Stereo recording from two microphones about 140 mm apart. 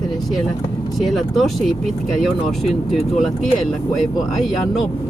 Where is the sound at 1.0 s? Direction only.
Centre (ahead or behind).